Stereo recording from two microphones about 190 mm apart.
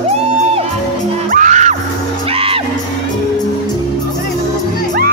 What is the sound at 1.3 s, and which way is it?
Music, 40° right (ahead or behind).